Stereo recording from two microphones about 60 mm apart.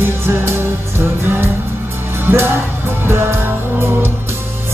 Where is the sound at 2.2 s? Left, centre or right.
Right.